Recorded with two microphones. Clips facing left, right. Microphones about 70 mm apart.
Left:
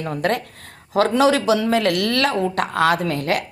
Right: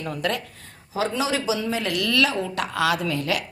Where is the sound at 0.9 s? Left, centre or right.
Left.